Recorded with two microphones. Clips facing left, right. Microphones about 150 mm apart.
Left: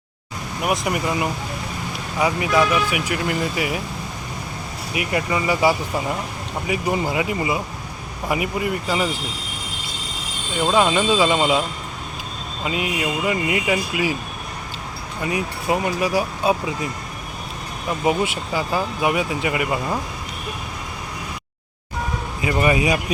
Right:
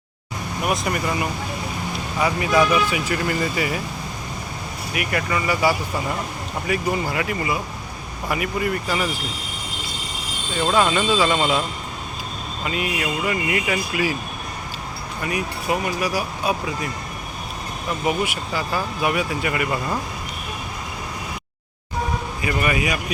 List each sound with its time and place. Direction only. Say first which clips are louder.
0.6 s speech: left 1 dB; 20° left (ahead or behind)
4.9 s speech: left 2 dB; 20° left (ahead or behind)
10.6 s speech: left 1 dB; 15° left (ahead or behind)
12.6 s speech: left 2 dB; 20° left (ahead or behind)
15.2 s speech: left 2 dB; 25° left (ahead or behind)
18.0 s speech: left 3 dB; 25° left (ahead or behind)
22.4 s speech: left 5 dB; 25° left (ahead or behind)